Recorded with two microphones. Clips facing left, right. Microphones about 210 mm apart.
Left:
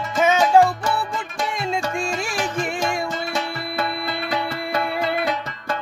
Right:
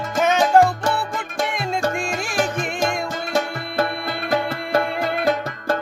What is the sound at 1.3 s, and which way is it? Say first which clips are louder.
Music: right 1 dB; 50° right (ahead or behind).